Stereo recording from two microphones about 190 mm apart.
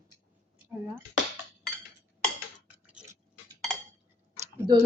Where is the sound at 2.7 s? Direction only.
5° right (ahead or behind).